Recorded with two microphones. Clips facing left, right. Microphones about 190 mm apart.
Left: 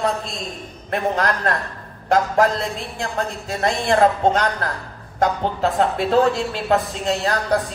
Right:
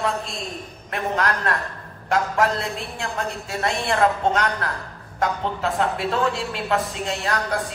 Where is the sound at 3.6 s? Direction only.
35° left (ahead or behind).